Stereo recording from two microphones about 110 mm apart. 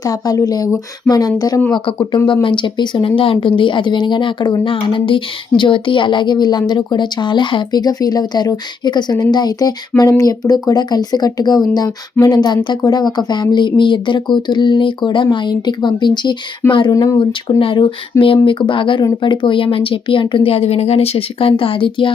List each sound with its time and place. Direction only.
0.0 s a woman's voice: 35° left (ahead or behind)
1.7 s a woman's voice: 45° left (ahead or behind)
16.9 s a woman's voice: 35° left (ahead or behind)
17.2 s speech: 55° left (ahead or behind)